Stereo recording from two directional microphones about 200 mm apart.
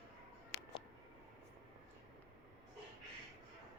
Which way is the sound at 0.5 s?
55° left (ahead or behind).